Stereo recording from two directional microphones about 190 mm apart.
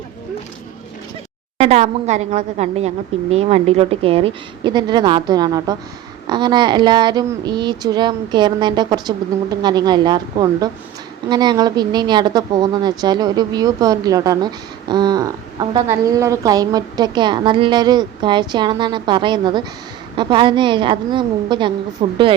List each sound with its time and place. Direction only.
1.5 s a woman's voice: 35° right (ahead or behind)